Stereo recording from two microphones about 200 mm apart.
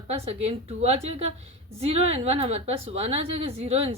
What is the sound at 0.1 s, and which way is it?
A woman's voice, 30° right (ahead or behind).